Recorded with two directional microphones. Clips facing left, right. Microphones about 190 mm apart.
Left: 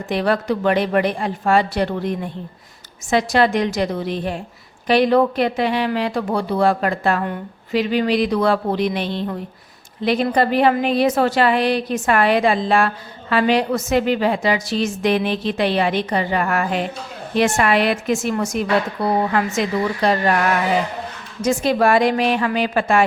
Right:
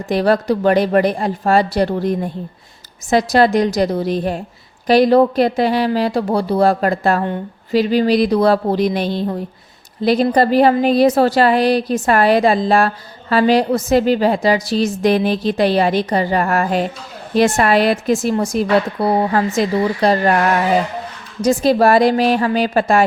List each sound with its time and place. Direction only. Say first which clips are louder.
0.1 s speech: right 4 dB; 35° right (ahead or behind)
21.4 s speech: right 4 dB; 35° right (ahead or behind)